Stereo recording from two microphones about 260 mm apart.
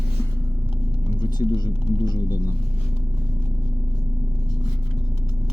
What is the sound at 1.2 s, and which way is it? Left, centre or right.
Speech, centre.